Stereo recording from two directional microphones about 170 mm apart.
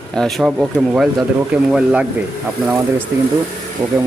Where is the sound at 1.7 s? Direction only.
5° right (ahead or behind).